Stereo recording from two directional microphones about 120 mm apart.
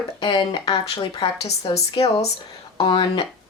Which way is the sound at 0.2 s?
40° left (ahead or behind).